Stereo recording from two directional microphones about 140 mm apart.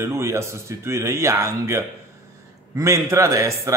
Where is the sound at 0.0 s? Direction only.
20° right (ahead or behind).